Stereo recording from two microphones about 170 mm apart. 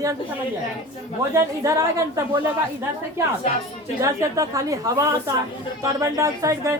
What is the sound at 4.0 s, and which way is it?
Speech, 20° right (ahead or behind).